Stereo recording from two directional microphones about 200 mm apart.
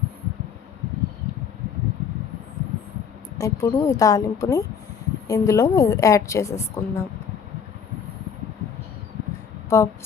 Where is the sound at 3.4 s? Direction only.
15° left (ahead or behind).